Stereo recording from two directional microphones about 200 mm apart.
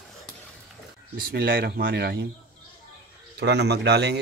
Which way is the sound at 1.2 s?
50° right (ahead or behind).